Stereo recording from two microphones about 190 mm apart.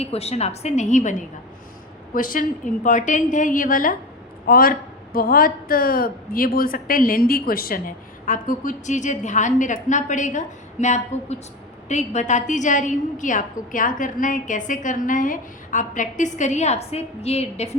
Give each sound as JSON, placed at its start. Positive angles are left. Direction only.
{"t": 0.0, "sound": "a woman's voice", "side_deg": 35}
{"t": 2.1, "sound": "a woman's voice", "side_deg": 45}